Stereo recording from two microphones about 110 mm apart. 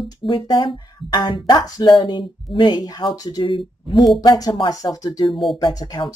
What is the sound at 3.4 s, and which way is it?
Speech, 50° left (ahead or behind).